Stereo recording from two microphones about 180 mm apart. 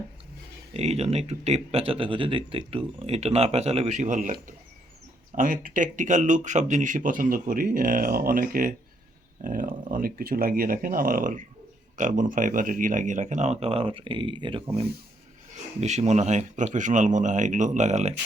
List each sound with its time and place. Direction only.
0.7 s speech: 35° right (ahead or behind)